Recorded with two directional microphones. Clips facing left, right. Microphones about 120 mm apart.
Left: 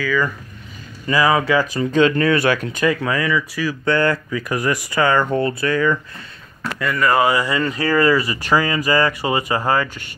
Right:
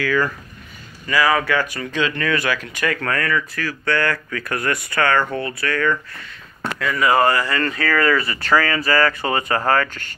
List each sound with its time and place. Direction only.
1.0 s speech: 20° left (ahead or behind)
1.9 s speech: 40° left (ahead or behind)
3.0 s speech: 15° left (ahead or behind)
3.8 s speech: 25° left (ahead or behind)
6.8 s speech: centre (ahead or behind)
7.2 s speech: 15° left (ahead or behind)